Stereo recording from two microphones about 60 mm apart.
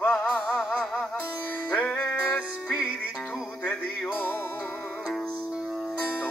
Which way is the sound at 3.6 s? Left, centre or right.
Left.